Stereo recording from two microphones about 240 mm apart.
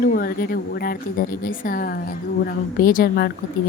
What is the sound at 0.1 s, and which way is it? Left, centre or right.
Speech, left.